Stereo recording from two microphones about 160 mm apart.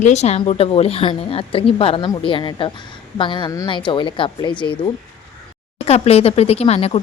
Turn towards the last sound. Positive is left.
turn(degrees=40)  # may be behind; listen again after turning